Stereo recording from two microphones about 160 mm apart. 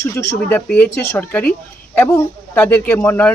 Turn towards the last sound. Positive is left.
turn(degrees=10)  # may be behind; listen again after turning